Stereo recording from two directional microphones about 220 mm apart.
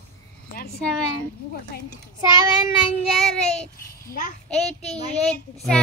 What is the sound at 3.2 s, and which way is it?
Speech, centre (ahead or behind).